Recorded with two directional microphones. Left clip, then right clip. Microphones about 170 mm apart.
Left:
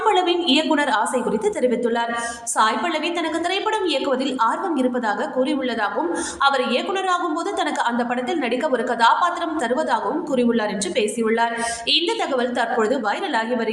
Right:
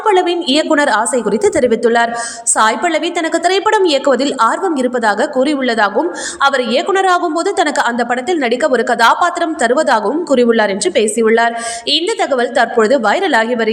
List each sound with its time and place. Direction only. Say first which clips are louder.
0.0 s a woman's voice: right 6 dB; 35° right (ahead or behind)